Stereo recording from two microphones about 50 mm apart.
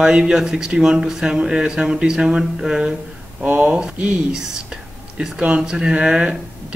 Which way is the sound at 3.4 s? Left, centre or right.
Right.